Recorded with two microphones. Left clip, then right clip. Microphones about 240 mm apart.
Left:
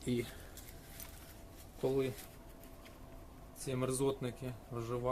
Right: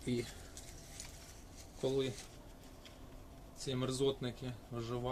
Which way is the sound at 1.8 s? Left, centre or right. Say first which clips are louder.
Left 1 dB; centre.